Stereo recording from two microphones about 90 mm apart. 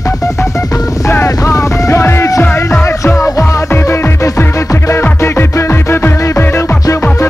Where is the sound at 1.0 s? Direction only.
35° left (ahead or behind).